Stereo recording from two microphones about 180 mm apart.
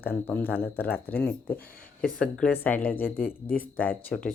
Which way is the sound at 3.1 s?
55° left (ahead or behind).